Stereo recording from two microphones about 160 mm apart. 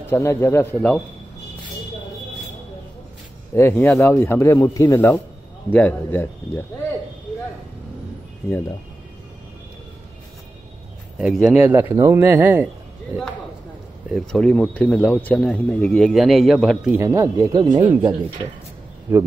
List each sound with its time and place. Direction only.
0.0 s speech: 15° left (ahead or behind)
3.5 s speech: 15° left (ahead or behind)
11.1 s speech: 5° right (ahead or behind)
14.1 s speech: 5° left (ahead or behind)
17.0 s speech: 20° right (ahead or behind)